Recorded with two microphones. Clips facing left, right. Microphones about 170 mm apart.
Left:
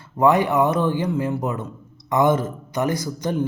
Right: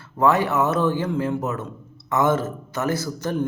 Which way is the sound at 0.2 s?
15° left (ahead or behind).